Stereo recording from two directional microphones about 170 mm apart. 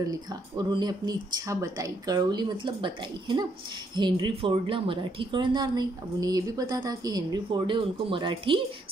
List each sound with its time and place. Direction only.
0.0 s a woman's voice: 25° right (ahead or behind)